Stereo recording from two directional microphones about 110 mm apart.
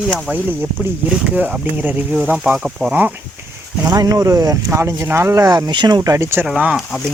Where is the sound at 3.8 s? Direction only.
35° right (ahead or behind).